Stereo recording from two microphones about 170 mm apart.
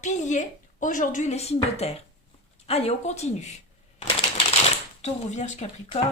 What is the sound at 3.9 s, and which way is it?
Typewriter, 35° left (ahead or behind).